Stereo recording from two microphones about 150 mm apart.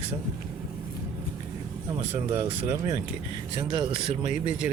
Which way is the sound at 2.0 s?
45° right (ahead or behind).